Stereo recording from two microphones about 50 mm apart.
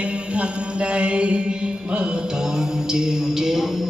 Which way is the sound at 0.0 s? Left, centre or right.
Right.